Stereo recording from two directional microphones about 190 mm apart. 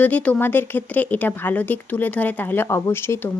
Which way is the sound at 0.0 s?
5° left (ahead or behind).